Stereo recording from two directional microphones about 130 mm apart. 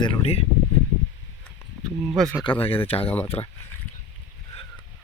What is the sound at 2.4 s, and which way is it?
Speech, 45° left (ahead or behind).